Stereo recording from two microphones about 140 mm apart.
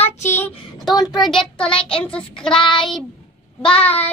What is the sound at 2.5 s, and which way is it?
Child singing, 35° left (ahead or behind).